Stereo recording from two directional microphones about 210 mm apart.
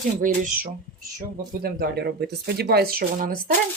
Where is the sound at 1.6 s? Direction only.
50° right (ahead or behind).